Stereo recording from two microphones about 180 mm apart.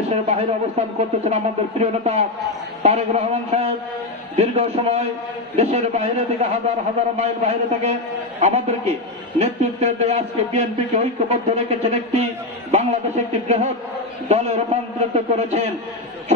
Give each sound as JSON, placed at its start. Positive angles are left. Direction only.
{"t": 0.1, "sound": "speech", "side_deg": -35}